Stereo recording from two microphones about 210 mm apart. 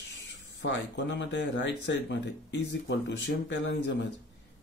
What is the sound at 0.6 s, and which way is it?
Speech, 60° left (ahead or behind).